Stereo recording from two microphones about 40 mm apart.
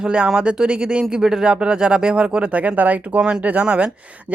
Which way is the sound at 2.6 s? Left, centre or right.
Right.